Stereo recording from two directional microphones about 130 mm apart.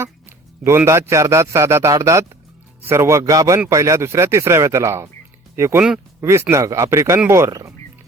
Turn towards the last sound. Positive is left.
turn(degrees=-25)  # may be behind; listen again after turning